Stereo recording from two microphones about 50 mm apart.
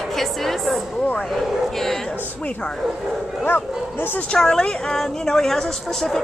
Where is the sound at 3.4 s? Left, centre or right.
Left.